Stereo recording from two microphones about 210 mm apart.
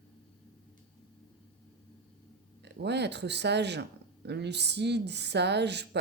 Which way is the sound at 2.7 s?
55° right (ahead or behind).